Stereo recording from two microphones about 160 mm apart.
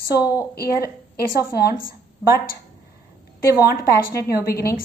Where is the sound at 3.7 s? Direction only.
70° left (ahead or behind).